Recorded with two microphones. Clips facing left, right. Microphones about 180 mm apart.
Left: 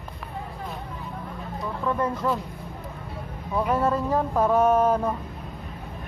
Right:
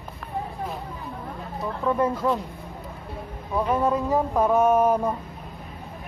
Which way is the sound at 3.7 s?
10° right (ahead or behind).